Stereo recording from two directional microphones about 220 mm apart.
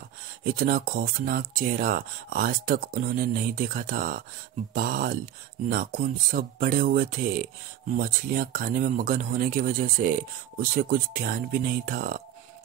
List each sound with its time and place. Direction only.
0.4 s speech: 40° right (ahead or behind)